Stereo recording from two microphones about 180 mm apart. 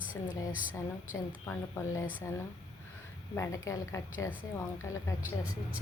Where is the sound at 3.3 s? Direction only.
15° left (ahead or behind).